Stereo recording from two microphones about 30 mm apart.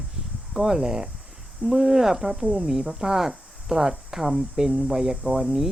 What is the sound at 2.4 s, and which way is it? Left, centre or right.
Speech, right.